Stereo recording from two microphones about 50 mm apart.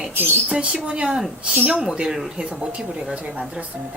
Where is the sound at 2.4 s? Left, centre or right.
Right.